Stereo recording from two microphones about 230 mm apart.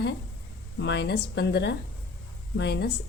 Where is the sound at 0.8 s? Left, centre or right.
Left.